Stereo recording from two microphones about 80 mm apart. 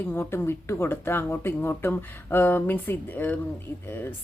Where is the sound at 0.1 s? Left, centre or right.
Left.